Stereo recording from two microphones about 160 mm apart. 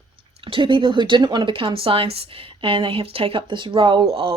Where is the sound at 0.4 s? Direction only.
30° right (ahead or behind).